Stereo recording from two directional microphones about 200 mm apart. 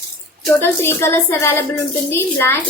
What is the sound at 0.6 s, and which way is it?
A woman's voice, 10° left (ahead or behind).